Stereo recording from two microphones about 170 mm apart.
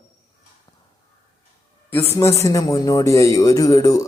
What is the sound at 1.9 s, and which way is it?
A man's voice, 15° left (ahead or behind).